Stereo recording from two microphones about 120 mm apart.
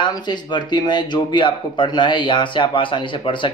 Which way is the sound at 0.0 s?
40° left (ahead or behind).